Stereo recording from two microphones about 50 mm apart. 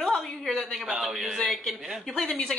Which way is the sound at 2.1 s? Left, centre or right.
Centre.